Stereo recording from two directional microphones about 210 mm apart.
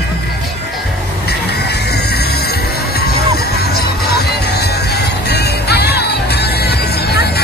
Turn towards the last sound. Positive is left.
turn(degrees=50)  # may be behind; listen again after turning